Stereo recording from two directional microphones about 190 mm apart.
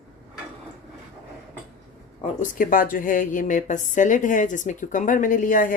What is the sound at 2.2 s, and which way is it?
A woman's voice, 45° left (ahead or behind).